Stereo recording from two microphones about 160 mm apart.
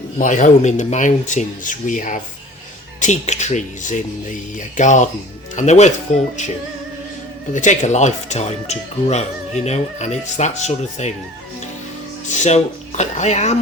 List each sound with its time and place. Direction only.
0.2 s speech: 50° left (ahead or behind)
7.5 s speech: 50° left (ahead or behind)
12.3 s speech: 45° left (ahead or behind)